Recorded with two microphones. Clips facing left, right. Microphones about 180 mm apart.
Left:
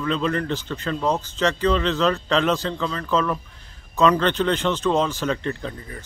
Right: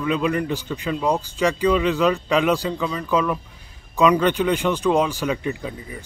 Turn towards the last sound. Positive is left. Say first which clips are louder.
# right 1 dB
turn(degrees=-10)  # may be behind; listen again after turning